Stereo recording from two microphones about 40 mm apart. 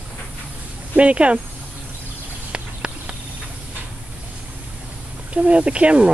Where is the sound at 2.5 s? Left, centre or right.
Right.